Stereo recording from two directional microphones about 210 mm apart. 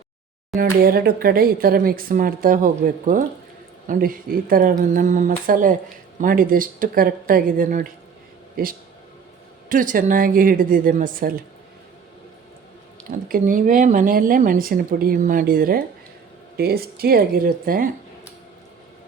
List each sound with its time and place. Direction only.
0.5 s speech: 45° right (ahead or behind)
13.1 s speech: 40° right (ahead or behind)